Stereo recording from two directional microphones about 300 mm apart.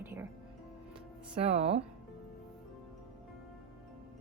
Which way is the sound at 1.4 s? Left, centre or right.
Right.